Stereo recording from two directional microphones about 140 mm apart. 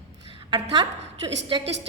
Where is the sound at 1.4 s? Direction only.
40° right (ahead or behind).